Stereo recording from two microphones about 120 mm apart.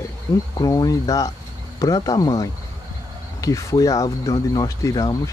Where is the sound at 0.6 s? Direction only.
30° left (ahead or behind).